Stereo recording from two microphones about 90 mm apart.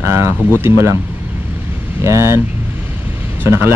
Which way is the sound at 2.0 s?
30° right (ahead or behind).